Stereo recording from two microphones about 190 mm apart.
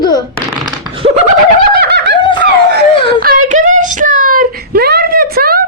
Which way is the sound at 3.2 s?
45° right (ahead or behind).